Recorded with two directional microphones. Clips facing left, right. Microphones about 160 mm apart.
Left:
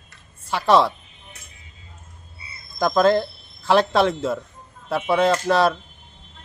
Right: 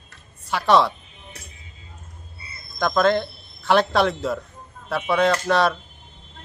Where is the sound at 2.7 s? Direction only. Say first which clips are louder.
Left 2 dB; 5° left (ahead or behind).